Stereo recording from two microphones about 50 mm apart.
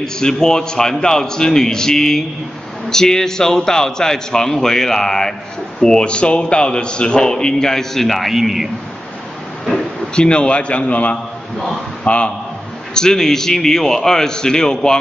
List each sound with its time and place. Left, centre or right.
0.0 s a man's voice: centre
10.1 s a man's voice: centre
12.9 s a man's voice: centre